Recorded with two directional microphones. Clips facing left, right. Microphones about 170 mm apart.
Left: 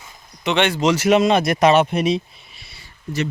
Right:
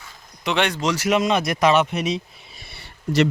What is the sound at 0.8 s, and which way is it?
Speech, 20° left (ahead or behind).